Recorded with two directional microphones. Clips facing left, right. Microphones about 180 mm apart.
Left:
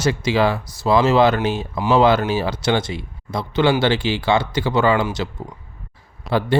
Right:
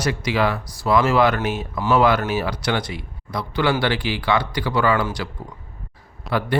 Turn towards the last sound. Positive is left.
turn(degrees=25)  # may be behind; listen again after turning